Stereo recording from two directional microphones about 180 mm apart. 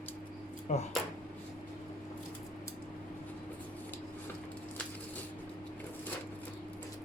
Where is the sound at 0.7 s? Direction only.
40° left (ahead or behind).